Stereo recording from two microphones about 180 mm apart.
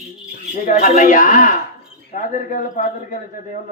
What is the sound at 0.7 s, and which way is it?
Music, 45° left (ahead or behind).